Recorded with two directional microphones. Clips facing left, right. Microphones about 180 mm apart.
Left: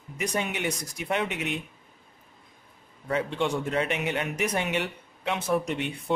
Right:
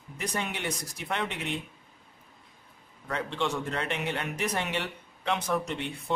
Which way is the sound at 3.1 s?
10° left (ahead or behind).